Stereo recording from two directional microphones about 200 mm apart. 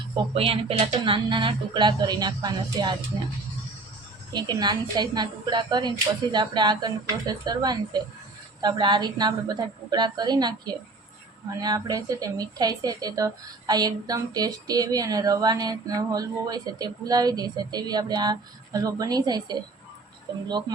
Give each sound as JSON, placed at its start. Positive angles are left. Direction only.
{"t": 0.3, "sound": "a woman's voice", "side_deg": -30}
{"t": 4.3, "sound": "a woman's voice", "side_deg": -20}
{"t": 11.5, "sound": "a woman's voice", "side_deg": -20}